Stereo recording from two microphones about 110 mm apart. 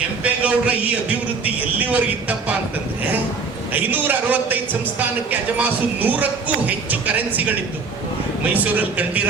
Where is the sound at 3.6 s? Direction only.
15° right (ahead or behind).